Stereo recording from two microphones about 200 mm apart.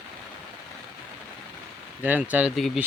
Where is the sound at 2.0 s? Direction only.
10° right (ahead or behind).